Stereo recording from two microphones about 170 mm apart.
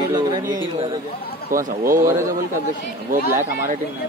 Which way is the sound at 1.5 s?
55° right (ahead or behind).